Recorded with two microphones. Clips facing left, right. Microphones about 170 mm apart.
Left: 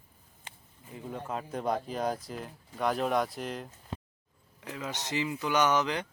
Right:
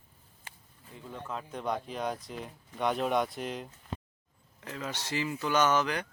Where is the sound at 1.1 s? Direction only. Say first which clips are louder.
Left 3 dB; 45° left (ahead or behind).